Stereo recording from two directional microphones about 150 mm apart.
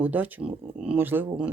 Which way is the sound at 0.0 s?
10° right (ahead or behind).